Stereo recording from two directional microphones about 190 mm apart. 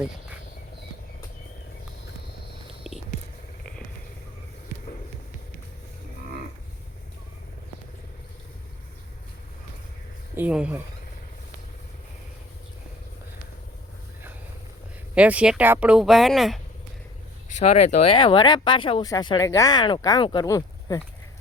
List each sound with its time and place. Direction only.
2.8 s a sound: centre (ahead or behind)
10.3 s speech: 5° right (ahead or behind)
15.1 s speech: 5° right (ahead or behind)
17.6 s speech: 35° left (ahead or behind); by 21.0 s 20° left (ahead or behind)